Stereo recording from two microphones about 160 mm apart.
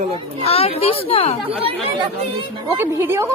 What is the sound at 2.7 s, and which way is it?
Speech, 15° right (ahead or behind).